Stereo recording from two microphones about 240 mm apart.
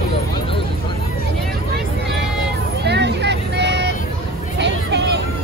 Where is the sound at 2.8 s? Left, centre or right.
Right.